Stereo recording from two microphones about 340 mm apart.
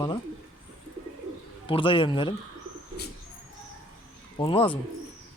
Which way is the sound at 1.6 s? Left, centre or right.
Centre.